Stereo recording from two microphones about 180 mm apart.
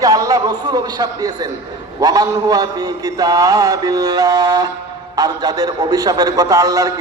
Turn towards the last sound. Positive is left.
turn(degrees=-20)  # may be behind; listen again after turning